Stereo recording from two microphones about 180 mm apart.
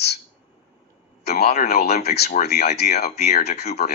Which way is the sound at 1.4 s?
40° left (ahead or behind).